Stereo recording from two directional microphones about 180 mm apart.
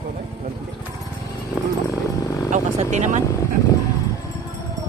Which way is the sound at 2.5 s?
40° right (ahead or behind).